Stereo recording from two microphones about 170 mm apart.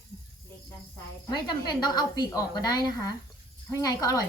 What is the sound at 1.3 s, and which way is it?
Speech, 25° left (ahead or behind).